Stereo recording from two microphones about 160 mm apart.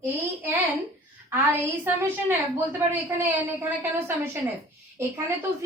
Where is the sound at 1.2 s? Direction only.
15° right (ahead or behind).